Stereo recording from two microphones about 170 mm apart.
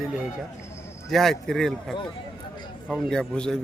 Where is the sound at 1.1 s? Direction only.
Centre (ahead or behind).